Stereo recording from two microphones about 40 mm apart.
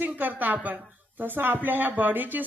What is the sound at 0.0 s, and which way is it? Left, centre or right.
Speech, right.